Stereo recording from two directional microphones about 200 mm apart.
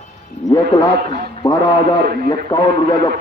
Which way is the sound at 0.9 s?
50° right (ahead or behind).